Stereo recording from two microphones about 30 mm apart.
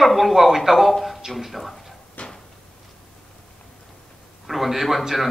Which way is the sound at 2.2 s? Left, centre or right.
Left.